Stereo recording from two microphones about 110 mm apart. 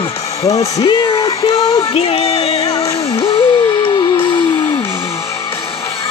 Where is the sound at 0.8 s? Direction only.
50° left (ahead or behind).